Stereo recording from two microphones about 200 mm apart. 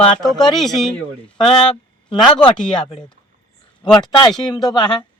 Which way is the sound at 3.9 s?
5° left (ahead or behind).